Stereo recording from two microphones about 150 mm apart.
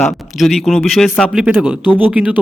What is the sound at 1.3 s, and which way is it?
Speech, 5° right (ahead or behind).